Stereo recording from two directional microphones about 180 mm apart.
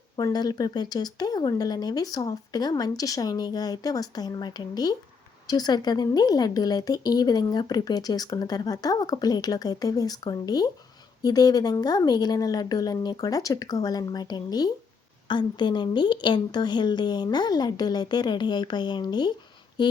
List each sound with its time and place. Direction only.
0.2 s a woman's voice: 20° left (ahead or behind)